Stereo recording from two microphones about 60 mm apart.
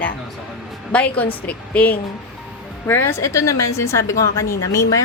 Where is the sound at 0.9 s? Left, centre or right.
Left.